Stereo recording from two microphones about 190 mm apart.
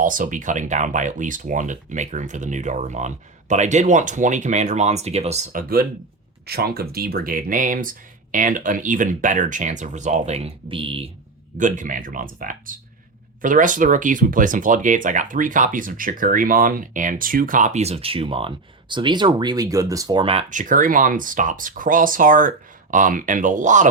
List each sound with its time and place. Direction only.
0.0 s speech: 45° right (ahead or behind); by 11.1 s 30° right (ahead or behind)
11.5 s speech: 40° right (ahead or behind)
20.5 s speech: 45° right (ahead or behind)